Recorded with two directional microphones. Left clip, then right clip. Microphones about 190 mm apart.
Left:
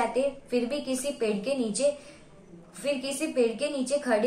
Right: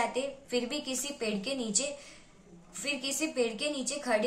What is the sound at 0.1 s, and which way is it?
A woman's voice, 15° right (ahead or behind).